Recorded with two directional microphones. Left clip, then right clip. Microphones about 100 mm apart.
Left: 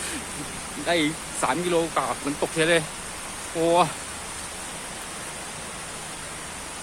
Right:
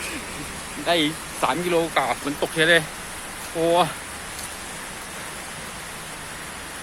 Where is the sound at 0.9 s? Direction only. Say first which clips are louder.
Right 2 dB; 15° left (ahead or behind).